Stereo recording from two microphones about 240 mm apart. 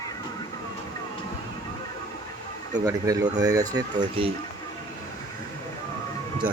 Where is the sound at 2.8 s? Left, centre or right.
Centre.